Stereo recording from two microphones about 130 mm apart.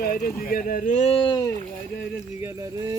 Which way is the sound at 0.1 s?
90° left.